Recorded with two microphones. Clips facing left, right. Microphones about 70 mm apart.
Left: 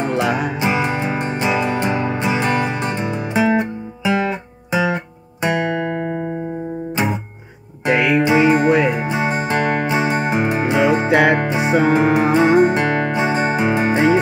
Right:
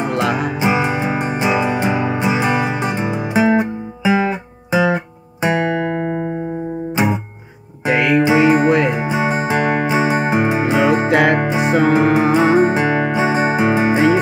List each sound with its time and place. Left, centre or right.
0.1 s music: centre
0.6 s music: centre
7.8 s music: centre
8.2 s music: centre
11.9 s music: centre